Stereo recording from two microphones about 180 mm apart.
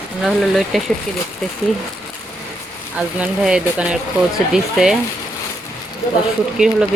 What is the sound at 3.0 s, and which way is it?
Speech, 5° right (ahead or behind).